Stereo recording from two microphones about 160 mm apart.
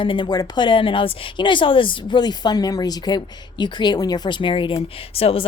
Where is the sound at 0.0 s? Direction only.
30° left (ahead or behind).